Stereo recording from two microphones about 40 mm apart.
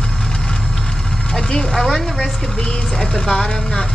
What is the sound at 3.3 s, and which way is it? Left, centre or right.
Speech, centre.